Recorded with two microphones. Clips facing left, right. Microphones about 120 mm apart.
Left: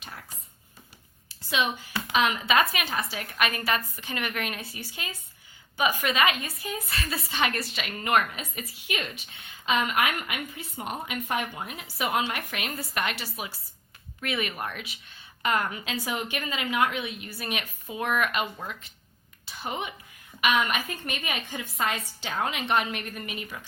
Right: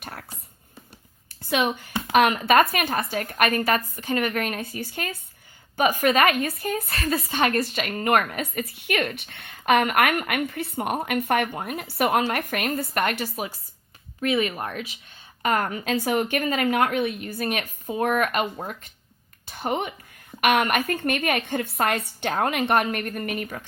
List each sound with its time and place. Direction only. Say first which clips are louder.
0.0 s dog: right 5 dB; 55° right (ahead or behind)
1.3 s a woman's voice: right 4 dB; 55° right (ahead or behind)